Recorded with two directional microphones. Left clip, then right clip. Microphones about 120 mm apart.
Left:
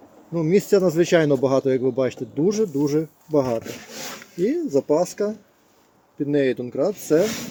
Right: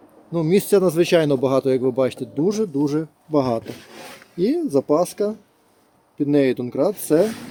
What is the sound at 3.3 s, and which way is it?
Speech, 45° right (ahead or behind).